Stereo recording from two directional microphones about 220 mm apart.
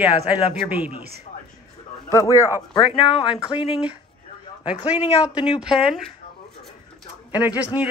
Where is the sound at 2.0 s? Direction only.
15° left (ahead or behind).